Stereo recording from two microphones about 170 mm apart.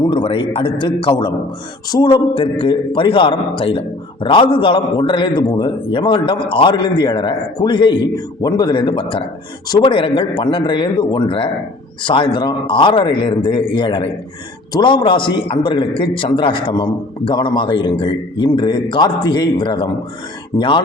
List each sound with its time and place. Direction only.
0.0 s a man's voice: 30° left (ahead or behind)